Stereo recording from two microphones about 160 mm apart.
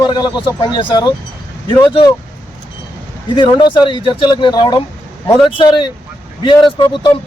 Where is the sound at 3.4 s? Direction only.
30° left (ahead or behind).